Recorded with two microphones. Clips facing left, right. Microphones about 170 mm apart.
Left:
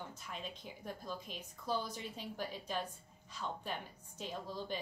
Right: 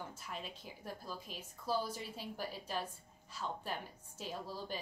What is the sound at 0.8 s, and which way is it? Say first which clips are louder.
A woman's voice: left 2 dB; 5° right (ahead or behind).